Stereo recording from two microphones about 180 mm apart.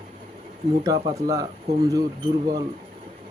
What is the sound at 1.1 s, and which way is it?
Speech, 20° right (ahead or behind).